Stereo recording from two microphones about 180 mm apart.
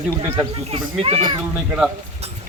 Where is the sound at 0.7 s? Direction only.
30° right (ahead or behind).